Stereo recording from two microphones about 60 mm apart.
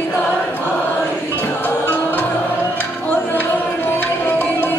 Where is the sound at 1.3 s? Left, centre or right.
Left.